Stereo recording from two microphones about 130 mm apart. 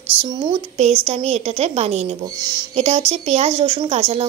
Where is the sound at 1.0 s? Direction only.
55° right (ahead or behind).